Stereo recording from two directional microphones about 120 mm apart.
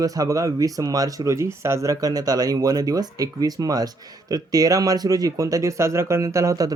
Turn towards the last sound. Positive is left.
turn(degrees=-30)  # may be behind; listen again after turning